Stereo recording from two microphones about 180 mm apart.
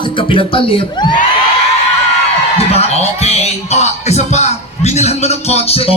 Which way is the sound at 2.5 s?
35° left (ahead or behind).